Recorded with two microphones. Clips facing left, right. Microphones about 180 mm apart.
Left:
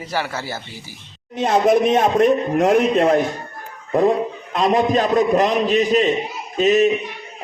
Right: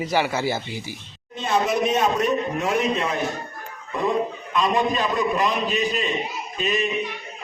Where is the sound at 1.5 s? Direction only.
50° left (ahead or behind).